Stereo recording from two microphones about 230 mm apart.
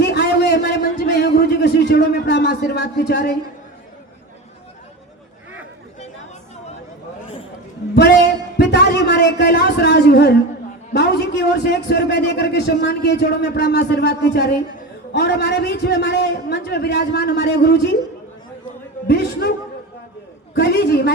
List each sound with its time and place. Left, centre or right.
0.0 s a sound: left
1.2 s speech: left
7.9 s a sound: left
10.9 s a man's voice: left
19.0 s a man's voice: left
20.6 s a man's voice: left